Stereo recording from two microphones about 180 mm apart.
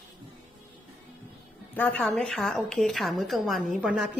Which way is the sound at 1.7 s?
10° left (ahead or behind).